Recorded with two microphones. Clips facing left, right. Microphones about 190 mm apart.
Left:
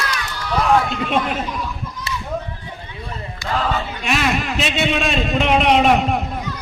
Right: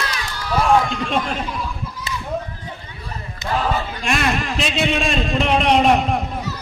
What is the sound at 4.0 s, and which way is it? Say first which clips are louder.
A man's voice: left 2 dB; 5° left (ahead or behind).